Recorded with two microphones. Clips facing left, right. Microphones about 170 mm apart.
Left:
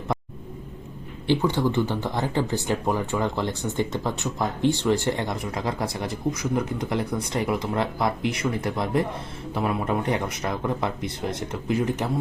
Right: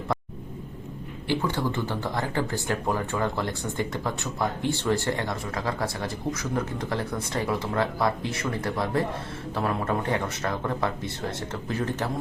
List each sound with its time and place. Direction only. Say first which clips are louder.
1.3 s speech: left 5 dB; 15° left (ahead or behind)